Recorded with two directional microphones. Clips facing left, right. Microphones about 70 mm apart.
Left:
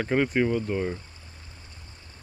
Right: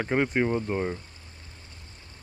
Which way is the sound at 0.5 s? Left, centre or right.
Right.